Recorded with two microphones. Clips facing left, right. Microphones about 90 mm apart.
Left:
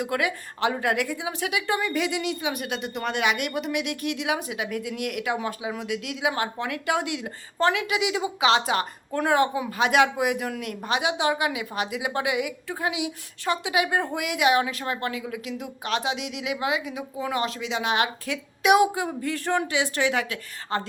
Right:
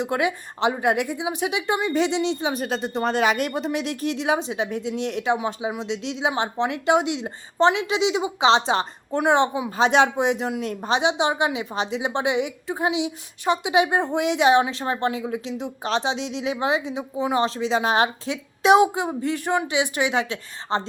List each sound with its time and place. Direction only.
0.0 s speech: 25° right (ahead or behind)